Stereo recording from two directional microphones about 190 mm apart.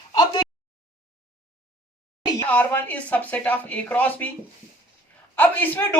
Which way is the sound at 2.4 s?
10° left (ahead or behind).